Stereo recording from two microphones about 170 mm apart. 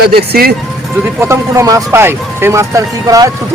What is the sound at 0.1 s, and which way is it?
Speech, 65° right (ahead or behind).